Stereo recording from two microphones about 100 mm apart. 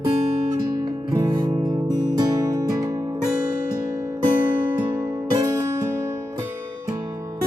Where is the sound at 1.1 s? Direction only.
40° right (ahead or behind).